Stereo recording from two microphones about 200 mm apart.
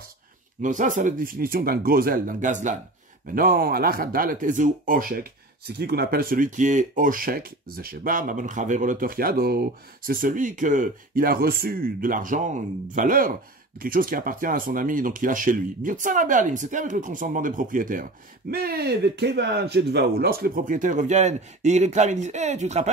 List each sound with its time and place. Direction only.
0.6 s speech: 40° right (ahead or behind)